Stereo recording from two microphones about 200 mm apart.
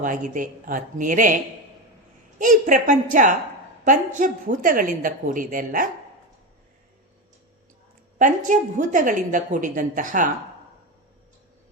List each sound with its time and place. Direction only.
0.0 s a woman's voice: 40° right (ahead or behind)
2.4 s a woman's voice: 40° right (ahead or behind)
8.2 s a woman's voice: 40° right (ahead or behind)